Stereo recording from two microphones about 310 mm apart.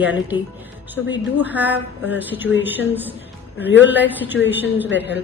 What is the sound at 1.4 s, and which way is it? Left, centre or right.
A man's voice, centre.